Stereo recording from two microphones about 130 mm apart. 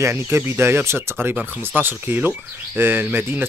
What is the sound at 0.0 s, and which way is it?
Speech, 20° right (ahead or behind).